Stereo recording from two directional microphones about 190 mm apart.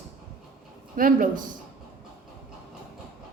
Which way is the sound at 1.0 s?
45° right (ahead or behind).